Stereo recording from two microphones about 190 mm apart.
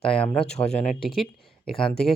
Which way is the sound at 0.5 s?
35° left (ahead or behind).